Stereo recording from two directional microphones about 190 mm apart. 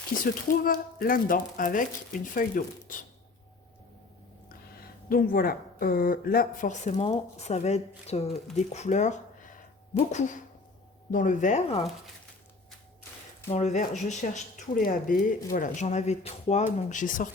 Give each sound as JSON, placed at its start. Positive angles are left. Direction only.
{"t": 0.4, "sound": "speech", "side_deg": 50}
{"t": 5.0, "sound": "speech", "side_deg": 50}
{"t": 13.5, "sound": "speech", "side_deg": 35}